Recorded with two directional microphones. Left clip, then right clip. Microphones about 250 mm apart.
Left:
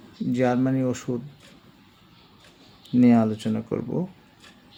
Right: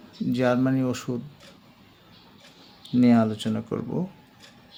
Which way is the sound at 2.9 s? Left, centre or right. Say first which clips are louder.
Left 1 dB; centre.